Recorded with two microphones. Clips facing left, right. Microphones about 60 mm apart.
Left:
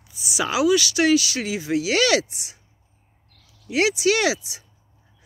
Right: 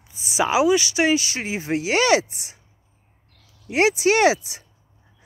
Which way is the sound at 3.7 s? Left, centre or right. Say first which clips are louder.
Right 2 dB; right.